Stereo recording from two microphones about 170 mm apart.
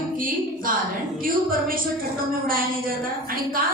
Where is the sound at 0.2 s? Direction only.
55° right (ahead or behind).